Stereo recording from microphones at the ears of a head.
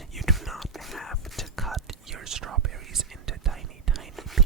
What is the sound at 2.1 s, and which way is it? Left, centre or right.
Whispering, right.